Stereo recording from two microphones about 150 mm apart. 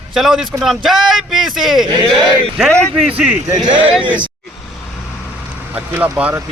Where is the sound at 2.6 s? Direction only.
Centre (ahead or behind).